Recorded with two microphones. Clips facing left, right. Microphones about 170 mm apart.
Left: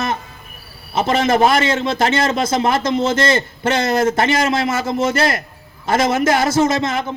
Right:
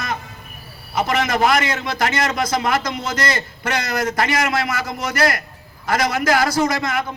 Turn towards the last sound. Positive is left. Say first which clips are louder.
# left 4 dB
turn(degrees=25)  # may be behind; listen again after turning